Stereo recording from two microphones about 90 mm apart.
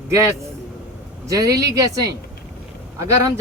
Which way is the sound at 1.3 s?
40° right (ahead or behind).